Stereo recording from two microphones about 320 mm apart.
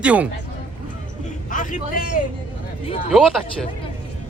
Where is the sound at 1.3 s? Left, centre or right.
Left.